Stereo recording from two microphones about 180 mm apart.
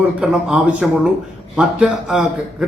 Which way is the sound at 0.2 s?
5° right (ahead or behind).